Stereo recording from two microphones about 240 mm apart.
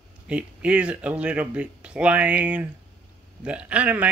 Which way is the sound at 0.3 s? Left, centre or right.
Centre.